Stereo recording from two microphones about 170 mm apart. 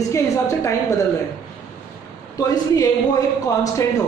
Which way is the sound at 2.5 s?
20° left (ahead or behind).